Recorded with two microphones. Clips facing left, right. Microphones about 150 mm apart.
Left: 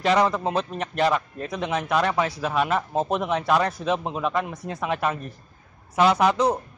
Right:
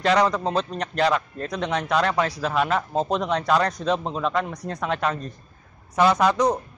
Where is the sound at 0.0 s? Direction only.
5° left (ahead or behind).